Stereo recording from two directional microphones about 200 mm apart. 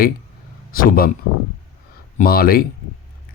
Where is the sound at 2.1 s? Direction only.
45° left (ahead or behind).